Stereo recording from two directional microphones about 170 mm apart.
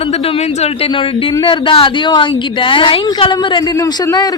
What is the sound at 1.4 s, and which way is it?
A woman's voice, 30° left (ahead or behind).